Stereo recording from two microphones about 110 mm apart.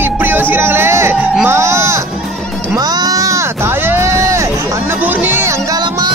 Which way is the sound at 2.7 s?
35° right (ahead or behind).